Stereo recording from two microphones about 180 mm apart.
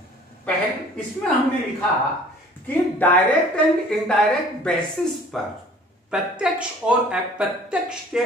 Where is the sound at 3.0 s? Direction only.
10° left (ahead or behind).